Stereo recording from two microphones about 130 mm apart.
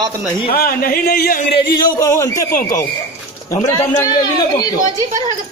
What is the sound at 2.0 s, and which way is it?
Speech, 20° left (ahead or behind).